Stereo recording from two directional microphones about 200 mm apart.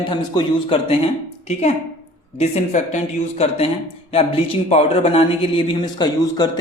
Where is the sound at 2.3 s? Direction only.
35° left (ahead or behind).